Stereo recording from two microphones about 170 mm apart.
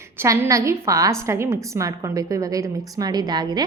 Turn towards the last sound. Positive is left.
turn(degrees=-25)  # may be behind; listen again after turning